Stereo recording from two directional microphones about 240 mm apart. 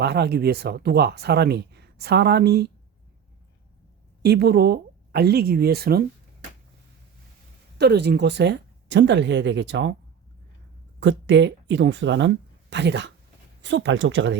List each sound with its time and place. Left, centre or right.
0.0 s speech: right
4.2 s speech: right
7.8 s speech: right
11.0 s speech: right